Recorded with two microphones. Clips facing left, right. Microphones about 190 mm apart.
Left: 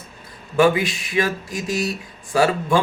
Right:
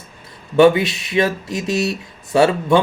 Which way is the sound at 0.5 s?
25° right (ahead or behind).